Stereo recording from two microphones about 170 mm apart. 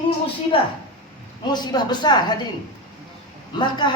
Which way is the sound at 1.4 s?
25° left (ahead or behind).